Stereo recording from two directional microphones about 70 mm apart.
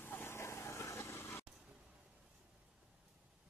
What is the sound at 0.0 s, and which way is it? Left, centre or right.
Vehicle, left.